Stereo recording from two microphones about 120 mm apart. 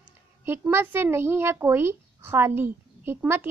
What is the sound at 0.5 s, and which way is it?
A child's voice, 20° right (ahead or behind).